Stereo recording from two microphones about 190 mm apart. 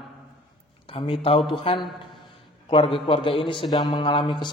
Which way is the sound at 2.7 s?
30° left (ahead or behind).